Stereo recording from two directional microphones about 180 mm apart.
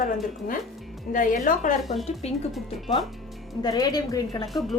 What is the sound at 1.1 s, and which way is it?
Speech, 50° left (ahead or behind).